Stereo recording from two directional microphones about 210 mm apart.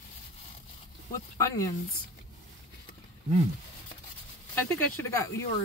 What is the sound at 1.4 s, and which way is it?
Speech, 15° left (ahead or behind).